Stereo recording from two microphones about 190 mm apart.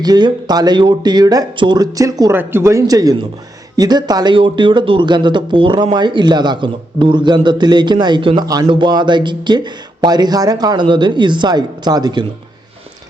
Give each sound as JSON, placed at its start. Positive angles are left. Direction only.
{"t": 0.0, "sound": "speech", "side_deg": -20}